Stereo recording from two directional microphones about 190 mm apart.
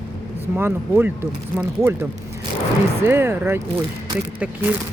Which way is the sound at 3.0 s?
10° right (ahead or behind).